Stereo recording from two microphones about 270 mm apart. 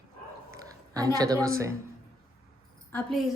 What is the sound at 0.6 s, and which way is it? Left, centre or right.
A woman's voice, centre.